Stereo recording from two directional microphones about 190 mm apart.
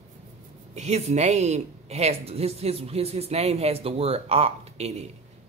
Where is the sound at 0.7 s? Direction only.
35° right (ahead or behind).